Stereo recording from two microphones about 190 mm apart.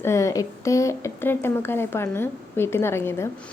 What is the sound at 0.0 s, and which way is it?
A woman's voice, 15° left (ahead or behind).